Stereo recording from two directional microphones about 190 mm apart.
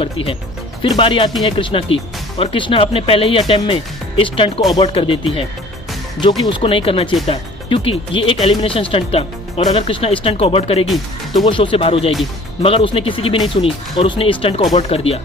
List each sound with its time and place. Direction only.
0.0 s music: 30° left (ahead or behind)
0.8 s speech: 25° left (ahead or behind)